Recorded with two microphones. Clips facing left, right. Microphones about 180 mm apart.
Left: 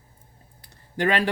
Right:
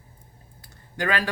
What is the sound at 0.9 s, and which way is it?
Speech, 30° left (ahead or behind).